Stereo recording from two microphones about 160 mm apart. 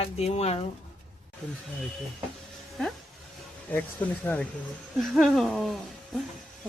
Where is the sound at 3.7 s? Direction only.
10° left (ahead or behind).